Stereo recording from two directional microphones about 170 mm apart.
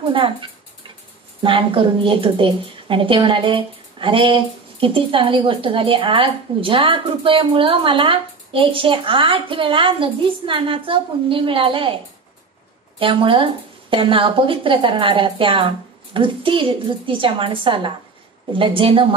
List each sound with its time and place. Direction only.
0.1 s a sound: 30° right (ahead or behind)
1.4 s a woman's voice: 30° right (ahead or behind)
13.0 s a woman's voice: 30° right (ahead or behind)